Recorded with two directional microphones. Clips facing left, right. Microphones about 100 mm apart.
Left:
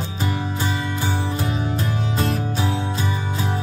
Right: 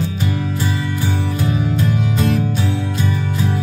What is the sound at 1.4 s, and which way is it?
Music, 30° left (ahead or behind).